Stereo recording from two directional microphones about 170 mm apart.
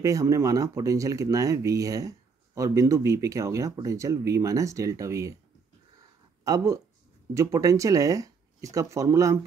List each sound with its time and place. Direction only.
0.0 s speech: 20° right (ahead or behind)
6.4 s speech: 20° right (ahead or behind)